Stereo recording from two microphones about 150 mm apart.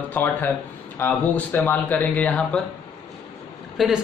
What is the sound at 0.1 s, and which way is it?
Speech, 10° left (ahead or behind).